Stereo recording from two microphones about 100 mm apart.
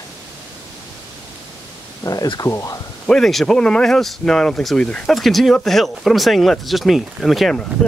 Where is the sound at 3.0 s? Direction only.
5° left (ahead or behind).